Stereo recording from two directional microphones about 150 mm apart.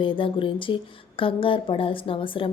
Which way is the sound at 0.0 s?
35° left (ahead or behind).